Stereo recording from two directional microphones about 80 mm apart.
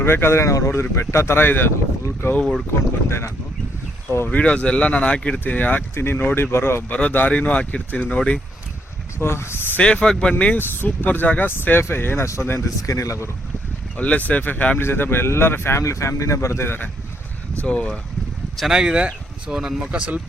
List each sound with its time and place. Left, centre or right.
0.0 s speech: left
2.3 s speech: centre
3.1 s speech: left
4.3 s speech: centre
6.9 s speech: centre
9.1 s speech: left
9.8 s speech: centre; by 13.3 s left
13.9 s speech: centre
17.6 s speech: centre
18.5 s speech: centre